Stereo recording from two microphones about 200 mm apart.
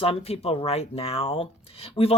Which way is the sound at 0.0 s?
30° left (ahead or behind).